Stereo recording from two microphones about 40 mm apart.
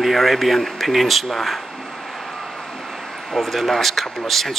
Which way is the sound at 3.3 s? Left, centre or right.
Centre.